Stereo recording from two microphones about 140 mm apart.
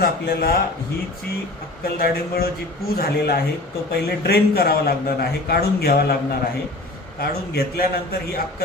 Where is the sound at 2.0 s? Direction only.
90° left.